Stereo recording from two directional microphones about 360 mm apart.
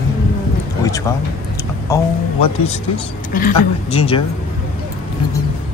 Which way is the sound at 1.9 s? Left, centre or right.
Centre.